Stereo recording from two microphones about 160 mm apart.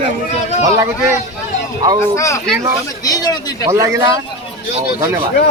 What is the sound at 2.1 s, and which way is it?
A man's voice, 20° left (ahead or behind).